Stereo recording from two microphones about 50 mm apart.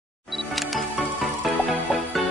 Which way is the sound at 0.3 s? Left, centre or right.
Centre.